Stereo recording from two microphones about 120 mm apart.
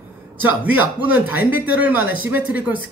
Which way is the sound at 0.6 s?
15° right (ahead or behind).